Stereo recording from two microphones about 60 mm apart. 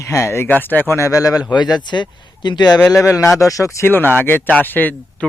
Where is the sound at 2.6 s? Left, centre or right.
Left.